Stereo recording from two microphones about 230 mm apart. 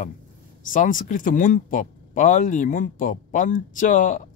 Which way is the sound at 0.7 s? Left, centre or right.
Left.